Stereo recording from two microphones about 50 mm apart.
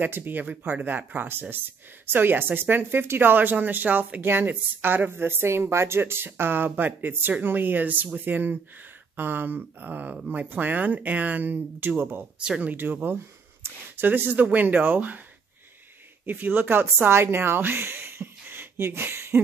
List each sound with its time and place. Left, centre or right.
0.0 s a woman's voice: right
16.3 s speech: right